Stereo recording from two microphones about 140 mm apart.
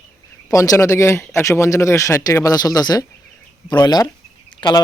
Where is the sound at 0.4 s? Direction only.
25° left (ahead or behind).